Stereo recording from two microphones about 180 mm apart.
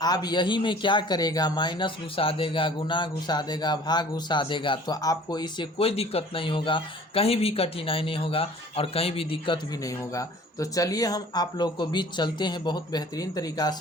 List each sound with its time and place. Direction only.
0.0 s speech: 20° left (ahead or behind)
9.8 s speech: 20° left (ahead or behind)